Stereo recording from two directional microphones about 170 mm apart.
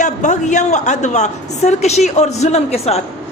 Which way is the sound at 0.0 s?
45° left (ahead or behind).